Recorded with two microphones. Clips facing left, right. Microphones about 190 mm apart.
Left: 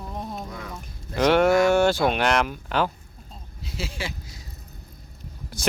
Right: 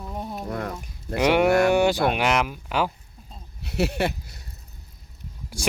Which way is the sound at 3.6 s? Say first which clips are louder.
Right 9 dB; 65° right (ahead or behind).